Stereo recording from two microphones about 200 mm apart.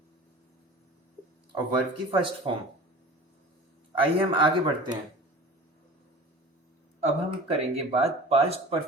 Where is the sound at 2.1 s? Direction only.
25° right (ahead or behind).